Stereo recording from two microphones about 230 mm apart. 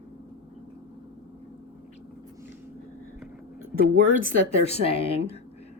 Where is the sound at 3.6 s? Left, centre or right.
Left.